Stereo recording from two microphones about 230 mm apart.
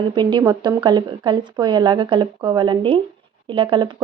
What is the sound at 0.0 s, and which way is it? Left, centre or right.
Speech, centre.